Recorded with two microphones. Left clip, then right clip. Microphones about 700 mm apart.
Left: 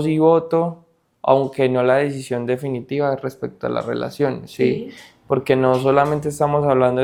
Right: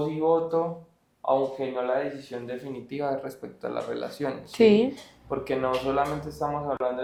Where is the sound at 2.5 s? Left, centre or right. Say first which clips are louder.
Left 12 dB; left.